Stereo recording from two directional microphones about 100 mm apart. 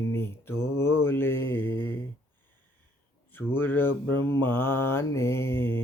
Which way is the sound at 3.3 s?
20° left (ahead or behind).